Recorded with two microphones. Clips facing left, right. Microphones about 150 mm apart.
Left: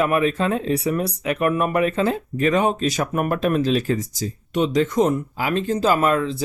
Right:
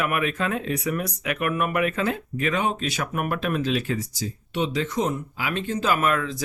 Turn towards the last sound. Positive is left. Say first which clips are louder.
# left 5 dB
turn(degrees=30)  # may be behind; listen again after turning